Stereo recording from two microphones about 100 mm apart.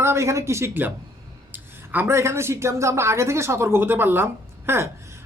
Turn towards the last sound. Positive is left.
turn(degrees=-25)  # may be behind; listen again after turning